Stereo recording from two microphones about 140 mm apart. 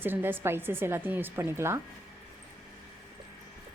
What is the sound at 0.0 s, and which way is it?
A woman's voice, 15° right (ahead or behind).